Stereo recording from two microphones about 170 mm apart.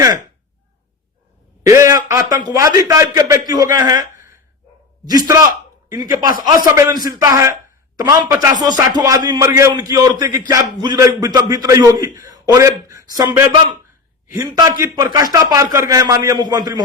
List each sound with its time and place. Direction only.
1.6 s a man's voice: 20° right (ahead or behind)
14.5 s a man's voice: 20° right (ahead or behind)